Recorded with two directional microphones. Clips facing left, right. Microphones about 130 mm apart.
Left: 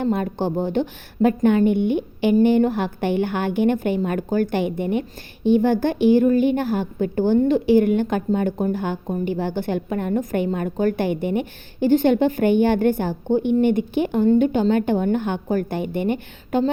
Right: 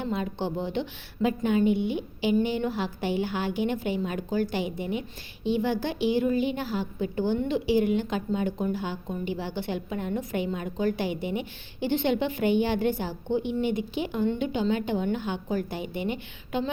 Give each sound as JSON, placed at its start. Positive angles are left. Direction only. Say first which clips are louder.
{"t": 0.0, "sound": "a woman's voice", "louder": "left 8 dB", "side_deg": 50}